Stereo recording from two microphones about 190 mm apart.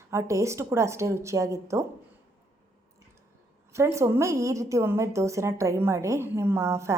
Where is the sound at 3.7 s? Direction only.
15° right (ahead or behind).